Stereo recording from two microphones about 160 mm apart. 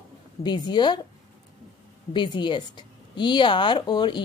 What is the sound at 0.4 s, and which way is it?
Speech, 25° left (ahead or behind).